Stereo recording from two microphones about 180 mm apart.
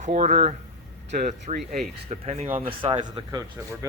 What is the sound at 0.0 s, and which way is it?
Speech, 40° right (ahead or behind).